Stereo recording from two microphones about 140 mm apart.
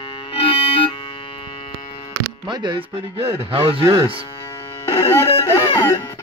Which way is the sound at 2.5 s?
35° right (ahead or behind).